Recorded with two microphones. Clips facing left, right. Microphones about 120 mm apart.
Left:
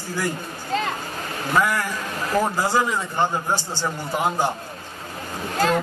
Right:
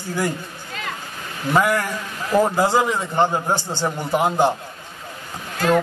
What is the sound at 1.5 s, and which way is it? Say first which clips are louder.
A man's voice: right 3 dB; 20° right (ahead or behind).